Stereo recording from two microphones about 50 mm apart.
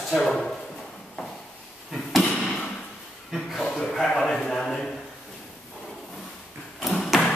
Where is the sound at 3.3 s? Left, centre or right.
Centre.